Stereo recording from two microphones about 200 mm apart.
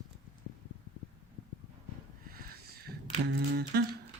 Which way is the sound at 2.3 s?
50° right (ahead or behind).